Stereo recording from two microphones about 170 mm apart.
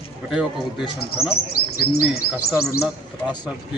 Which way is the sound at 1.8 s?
65° left (ahead or behind).